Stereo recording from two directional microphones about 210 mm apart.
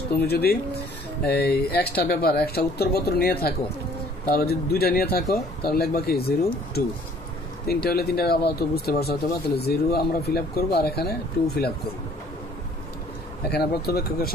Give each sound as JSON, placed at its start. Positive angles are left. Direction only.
{"t": 0.2, "sound": "speech", "side_deg": 50}
{"t": 13.5, "sound": "speech", "side_deg": 50}